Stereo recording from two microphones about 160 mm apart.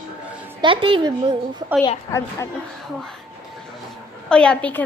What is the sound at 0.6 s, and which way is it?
Speech, 30° right (ahead or behind).